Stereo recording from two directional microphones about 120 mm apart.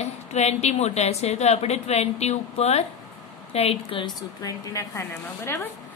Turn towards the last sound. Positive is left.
turn(degrees=20)  # may be behind; listen again after turning